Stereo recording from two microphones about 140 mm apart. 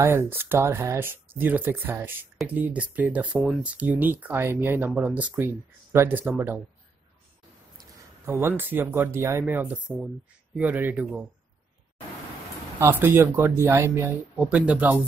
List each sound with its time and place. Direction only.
0.0 s speech: 15° right (ahead or behind)
8.3 s speech: 15° right (ahead or behind)
12.7 s speech: 15° right (ahead or behind)